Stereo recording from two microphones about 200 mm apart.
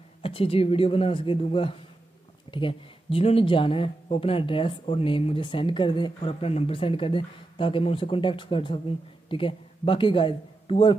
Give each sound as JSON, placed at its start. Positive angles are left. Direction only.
{"t": 0.2, "sound": "speech", "side_deg": 30}